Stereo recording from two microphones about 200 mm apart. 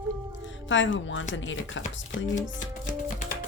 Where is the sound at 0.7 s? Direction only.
70° left (ahead or behind).